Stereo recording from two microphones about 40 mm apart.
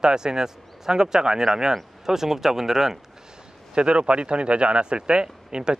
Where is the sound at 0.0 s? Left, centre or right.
Centre.